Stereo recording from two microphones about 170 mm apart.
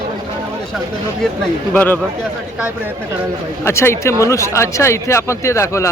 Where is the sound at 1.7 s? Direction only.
5° left (ahead or behind).